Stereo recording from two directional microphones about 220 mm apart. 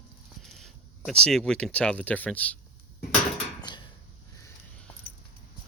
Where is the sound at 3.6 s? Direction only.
20° left (ahead or behind).